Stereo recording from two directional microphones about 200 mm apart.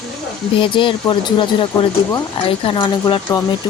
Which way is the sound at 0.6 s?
25° left (ahead or behind).